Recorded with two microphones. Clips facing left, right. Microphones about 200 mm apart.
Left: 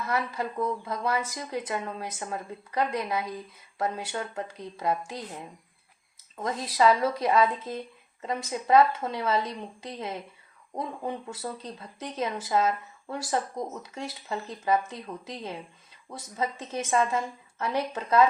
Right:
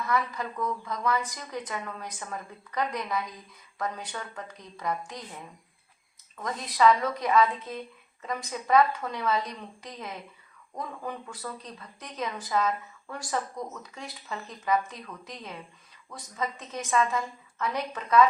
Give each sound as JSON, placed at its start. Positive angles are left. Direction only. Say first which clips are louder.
{"t": 0.1, "sound": "speech", "louder": "even", "side_deg": 25}
{"t": 6.3, "sound": "speech", "louder": "left 3 dB", "side_deg": 25}